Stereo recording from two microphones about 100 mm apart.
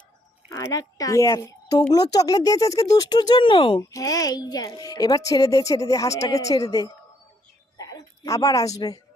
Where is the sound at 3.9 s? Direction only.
35° left (ahead or behind).